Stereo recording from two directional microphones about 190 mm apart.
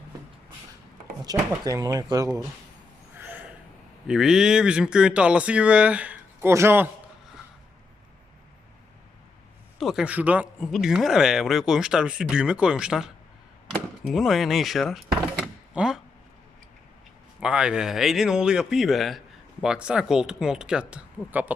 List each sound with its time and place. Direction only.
1.2 s speech: 20° right (ahead or behind)
3.2 s gasp: 10° right (ahead or behind)
4.0 s speech: 5° right (ahead or behind)
9.7 s speech: centre (ahead or behind)
17.4 s speech: 5° right (ahead or behind)